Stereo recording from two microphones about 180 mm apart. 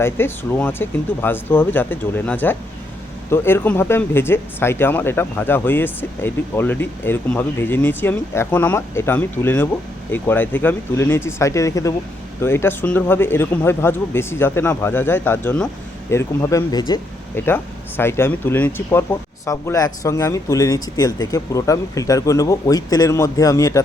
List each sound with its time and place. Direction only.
0.0 s speech: 10° left (ahead or behind)